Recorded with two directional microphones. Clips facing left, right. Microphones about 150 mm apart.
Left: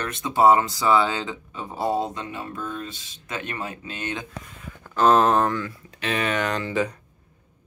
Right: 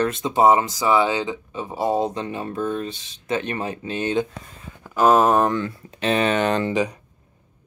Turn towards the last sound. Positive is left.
turn(degrees=-25)  # may be behind; listen again after turning